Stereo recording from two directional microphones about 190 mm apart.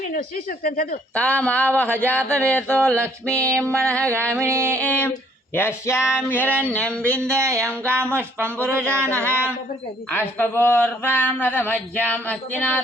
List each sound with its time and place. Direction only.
0.1 s speech: 50° left (ahead or behind)
1.1 s speech: 5° left (ahead or behind)
3.2 s music: 5° left (ahead or behind)
3.6 s speech: 5° left (ahead or behind)
4.3 s music: 15° right (ahead or behind)
4.8 s speech: 10° left (ahead or behind)
7.0 s music: 15° right (ahead or behind)
10.1 s speech: 10° left (ahead or behind)